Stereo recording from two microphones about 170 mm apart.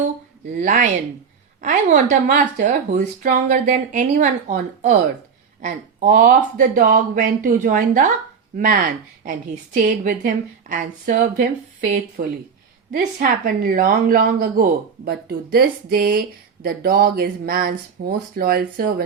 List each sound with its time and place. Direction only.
0.5 s speech: 45° right (ahead or behind)
2.0 s speech: 50° right (ahead or behind)
12.2 s speech: 60° right (ahead or behind)